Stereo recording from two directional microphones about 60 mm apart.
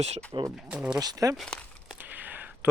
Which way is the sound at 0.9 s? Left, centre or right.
Right.